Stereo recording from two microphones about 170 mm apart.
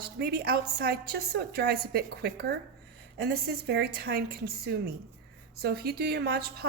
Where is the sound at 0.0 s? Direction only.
70° right (ahead or behind).